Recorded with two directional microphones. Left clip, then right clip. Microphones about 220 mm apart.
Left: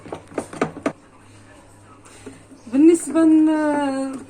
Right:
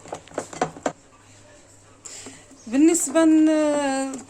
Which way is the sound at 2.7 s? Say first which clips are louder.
Left 3 dB; 40° right (ahead or behind).